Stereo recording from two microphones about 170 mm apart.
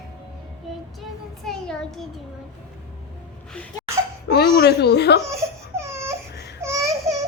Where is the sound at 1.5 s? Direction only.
Centre (ahead or behind).